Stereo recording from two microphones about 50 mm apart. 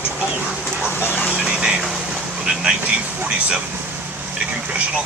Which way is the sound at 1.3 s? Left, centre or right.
Centre.